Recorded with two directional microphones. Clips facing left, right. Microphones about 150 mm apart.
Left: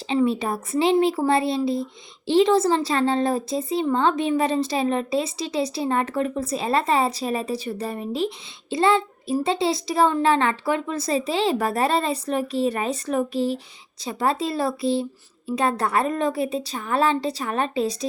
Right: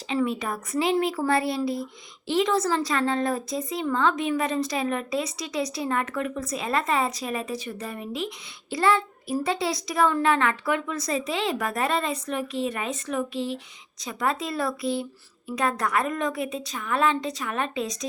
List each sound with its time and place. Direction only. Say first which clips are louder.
0.1 s a child's voice: left 5 dB; 30° left (ahead or behind)